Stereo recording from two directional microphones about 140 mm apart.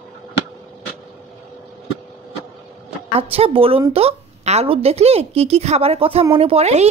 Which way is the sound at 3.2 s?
40° right (ahead or behind).